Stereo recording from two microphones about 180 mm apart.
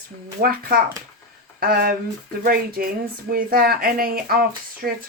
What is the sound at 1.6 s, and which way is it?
Speech, 55° right (ahead or behind).